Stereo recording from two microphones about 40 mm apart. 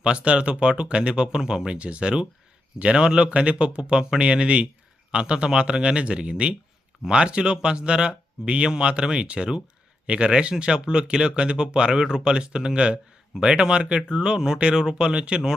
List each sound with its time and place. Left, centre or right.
0.0 s speech: right